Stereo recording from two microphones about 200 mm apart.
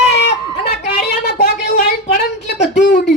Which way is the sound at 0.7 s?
50° left (ahead or behind).